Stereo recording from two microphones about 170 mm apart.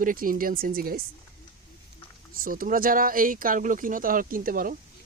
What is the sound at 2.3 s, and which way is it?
Speech, 55° right (ahead or behind).